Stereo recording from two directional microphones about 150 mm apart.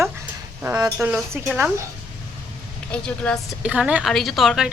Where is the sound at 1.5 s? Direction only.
15° right (ahead or behind).